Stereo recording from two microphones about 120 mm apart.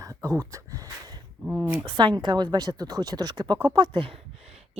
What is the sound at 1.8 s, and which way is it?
Speech, 40° right (ahead or behind).